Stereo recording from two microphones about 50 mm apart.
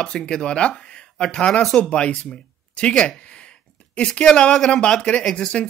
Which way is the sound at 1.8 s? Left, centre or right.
Left.